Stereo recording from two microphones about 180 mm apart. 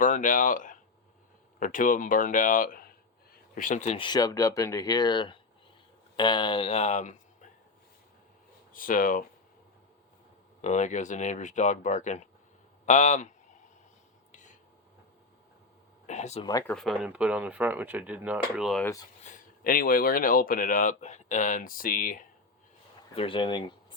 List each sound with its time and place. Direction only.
0.0 s speech: 45° left (ahead or behind)
8.7 s speech: 50° left (ahead or behind)
10.6 s a man's voice: 40° left (ahead or behind)
16.0 s a sound: 40° left (ahead or behind)
16.4 s speech: 20° left (ahead or behind)
16.6 s speech: 5° left (ahead or behind)
19.2 s speech: 50° left (ahead or behind)
23.1 s speech: 30° left (ahead or behind)